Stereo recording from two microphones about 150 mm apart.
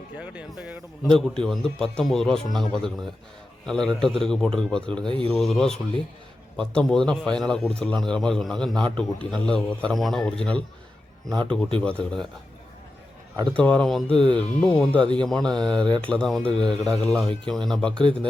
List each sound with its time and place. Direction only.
1.0 s a man's voice: 5° left (ahead or behind)
5.0 s speech: 35° right (ahead or behind)
5.3 s a man's voice: centre (ahead or behind)
13.5 s a man's voice: 5° left (ahead or behind)